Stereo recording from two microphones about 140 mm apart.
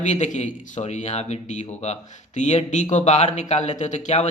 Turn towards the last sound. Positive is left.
turn(degrees=55)  # may be behind; listen again after turning